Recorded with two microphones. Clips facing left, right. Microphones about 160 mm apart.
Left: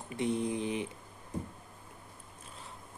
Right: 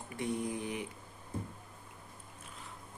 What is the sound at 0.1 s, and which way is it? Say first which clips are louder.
Mantra: left 4 dB; 25° left (ahead or behind).